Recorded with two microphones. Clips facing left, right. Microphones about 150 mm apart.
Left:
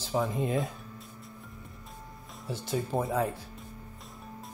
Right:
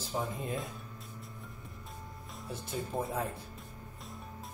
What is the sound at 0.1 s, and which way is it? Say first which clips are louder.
Speech: left 7 dB; 90° left.